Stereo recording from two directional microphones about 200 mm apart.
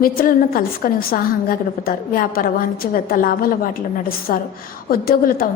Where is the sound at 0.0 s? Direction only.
45° left (ahead or behind).